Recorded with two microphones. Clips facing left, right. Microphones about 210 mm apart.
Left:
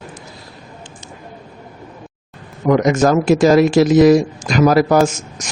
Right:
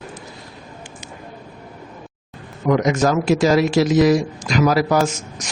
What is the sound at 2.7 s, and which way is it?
Speech, 45° left (ahead or behind).